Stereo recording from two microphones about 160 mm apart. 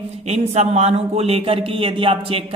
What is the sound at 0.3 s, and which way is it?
Speech, 45° right (ahead or behind).